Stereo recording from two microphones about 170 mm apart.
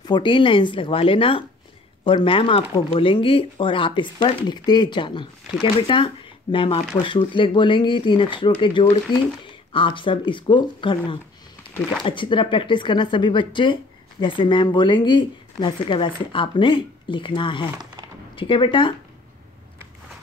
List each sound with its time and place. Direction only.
0.0 s speech: 25° left (ahead or behind)